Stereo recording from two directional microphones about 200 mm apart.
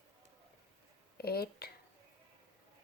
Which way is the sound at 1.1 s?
50° left (ahead or behind).